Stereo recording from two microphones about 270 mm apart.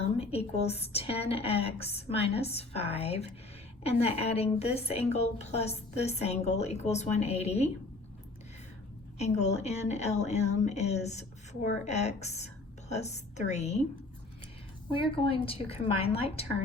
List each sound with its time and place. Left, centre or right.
0.0 s a woman's voice: left
9.1 s a woman's voice: left
14.9 s a woman's voice: centre